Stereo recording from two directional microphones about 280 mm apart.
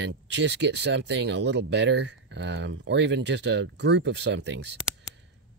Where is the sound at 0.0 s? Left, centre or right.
Right.